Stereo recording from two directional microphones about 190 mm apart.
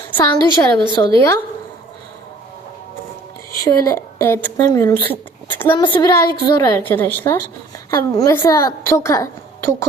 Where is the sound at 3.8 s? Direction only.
15° left (ahead or behind).